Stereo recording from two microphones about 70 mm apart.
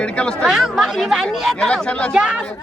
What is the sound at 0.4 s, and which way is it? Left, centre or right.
Speech, centre.